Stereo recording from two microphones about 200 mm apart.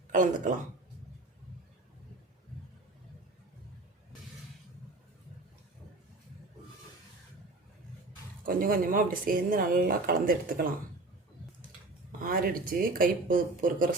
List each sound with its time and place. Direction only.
0.1 s speech: 40° right (ahead or behind)
8.4 s speech: 45° right (ahead or behind)
12.2 s speech: 45° right (ahead or behind)